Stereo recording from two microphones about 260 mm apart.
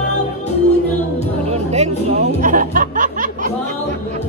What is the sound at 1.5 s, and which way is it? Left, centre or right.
Music, right.